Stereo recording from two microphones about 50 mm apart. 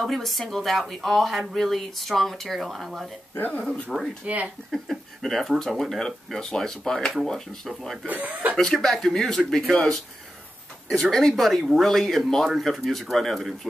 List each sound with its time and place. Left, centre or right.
0.0 s speech: centre
3.3 s speech: left
3.9 s speech: centre
8.1 s speech: right
8.7 s speech: centre
10.9 s speech: centre